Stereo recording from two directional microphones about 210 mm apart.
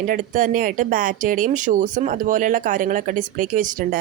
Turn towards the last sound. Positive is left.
turn(degrees=-40)  # may be behind; listen again after turning